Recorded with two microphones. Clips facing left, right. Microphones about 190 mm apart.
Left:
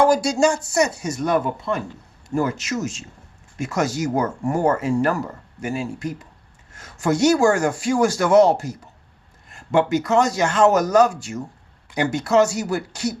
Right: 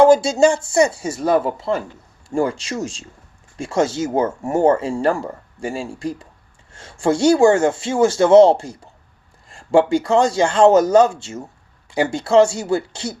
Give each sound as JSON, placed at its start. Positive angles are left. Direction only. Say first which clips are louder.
{"t": 0.0, "sound": "speech", "louder": "right 5 dB", "side_deg": -25}